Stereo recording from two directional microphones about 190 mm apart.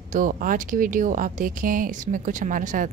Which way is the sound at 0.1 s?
45° right (ahead or behind).